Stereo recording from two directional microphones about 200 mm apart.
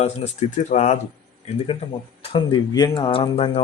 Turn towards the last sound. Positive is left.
turn(degrees=25)  # may be behind; listen again after turning